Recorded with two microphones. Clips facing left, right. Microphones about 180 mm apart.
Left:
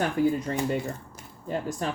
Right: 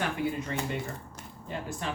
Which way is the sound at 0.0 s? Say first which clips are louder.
Left 6 dB; 40° left (ahead or behind).